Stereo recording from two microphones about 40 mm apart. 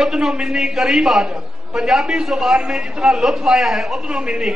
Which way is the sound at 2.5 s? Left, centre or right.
Right.